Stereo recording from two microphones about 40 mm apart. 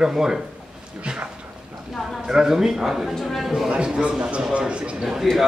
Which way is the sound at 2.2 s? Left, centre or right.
Centre.